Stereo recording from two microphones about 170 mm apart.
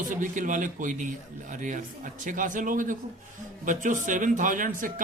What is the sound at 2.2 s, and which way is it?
Speech, 50° right (ahead or behind).